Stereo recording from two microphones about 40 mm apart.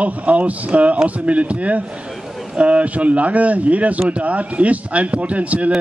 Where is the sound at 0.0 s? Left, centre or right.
Right.